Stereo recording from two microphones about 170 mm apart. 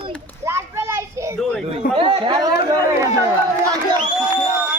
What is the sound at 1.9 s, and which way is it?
Speech, 30° right (ahead or behind).